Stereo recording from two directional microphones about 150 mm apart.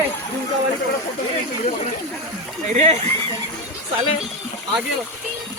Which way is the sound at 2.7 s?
45° right (ahead or behind).